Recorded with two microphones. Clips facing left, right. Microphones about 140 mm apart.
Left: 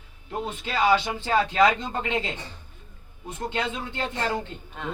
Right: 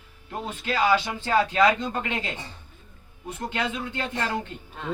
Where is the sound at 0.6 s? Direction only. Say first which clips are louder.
Even; 25° left (ahead or behind).